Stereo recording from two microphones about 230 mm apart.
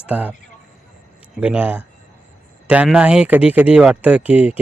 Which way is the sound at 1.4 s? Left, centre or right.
Centre.